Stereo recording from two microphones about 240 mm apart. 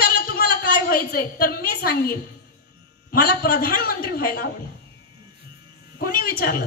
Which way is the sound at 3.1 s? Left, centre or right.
Left.